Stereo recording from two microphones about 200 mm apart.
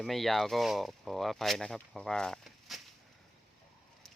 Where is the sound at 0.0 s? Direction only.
Centre (ahead or behind).